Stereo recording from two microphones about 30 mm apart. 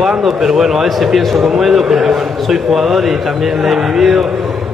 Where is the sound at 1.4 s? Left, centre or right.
Centre.